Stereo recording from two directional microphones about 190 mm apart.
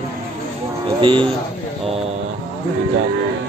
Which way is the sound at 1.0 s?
25° right (ahead or behind).